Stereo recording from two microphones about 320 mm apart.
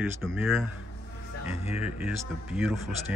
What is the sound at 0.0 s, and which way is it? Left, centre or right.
Speech, centre.